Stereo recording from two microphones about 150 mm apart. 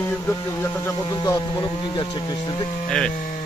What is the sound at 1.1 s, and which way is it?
Speech, 30° left (ahead or behind).